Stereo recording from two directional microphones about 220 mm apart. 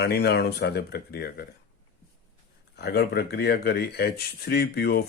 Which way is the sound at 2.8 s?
50° left (ahead or behind).